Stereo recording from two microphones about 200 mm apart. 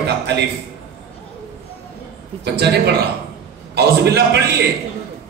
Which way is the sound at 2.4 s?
55° right (ahead or behind).